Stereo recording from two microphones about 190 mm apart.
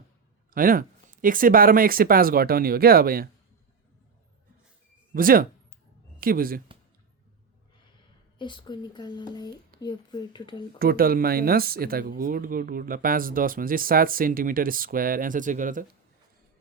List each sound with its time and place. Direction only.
0.5 s speech: 50° right (ahead or behind)
5.1 s speech: 50° right (ahead or behind)
8.4 s speech: 25° left (ahead or behind)
10.8 s speech: 50° right (ahead or behind)